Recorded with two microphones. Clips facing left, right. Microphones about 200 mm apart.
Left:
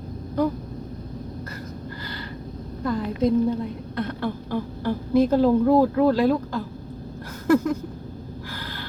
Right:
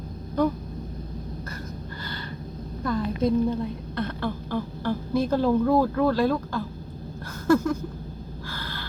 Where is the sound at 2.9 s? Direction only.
15° left (ahead or behind).